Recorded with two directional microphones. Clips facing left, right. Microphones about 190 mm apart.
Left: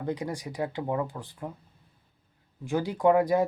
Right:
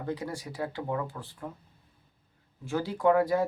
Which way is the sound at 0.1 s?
15° left (ahead or behind).